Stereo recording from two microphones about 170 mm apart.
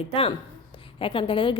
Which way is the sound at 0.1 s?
35° left (ahead or behind).